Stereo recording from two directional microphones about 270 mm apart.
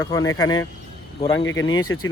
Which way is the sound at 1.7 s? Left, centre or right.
Centre.